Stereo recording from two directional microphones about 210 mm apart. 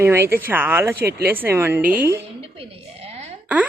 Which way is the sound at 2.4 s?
25° right (ahead or behind).